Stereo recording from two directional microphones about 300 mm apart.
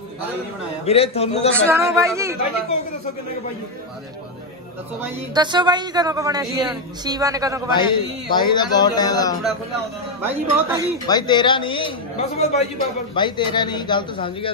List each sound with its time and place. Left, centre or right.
0.8 s a man's voice: centre
1.7 s speech: centre
5.0 s speech: centre
7.7 s a man's voice: centre
10.2 s speech: centre
11.1 s a man's voice: centre